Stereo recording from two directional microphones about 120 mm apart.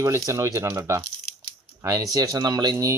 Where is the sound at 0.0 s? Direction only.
25° right (ahead or behind).